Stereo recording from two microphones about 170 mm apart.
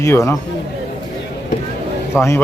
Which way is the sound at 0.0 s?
15° left (ahead or behind).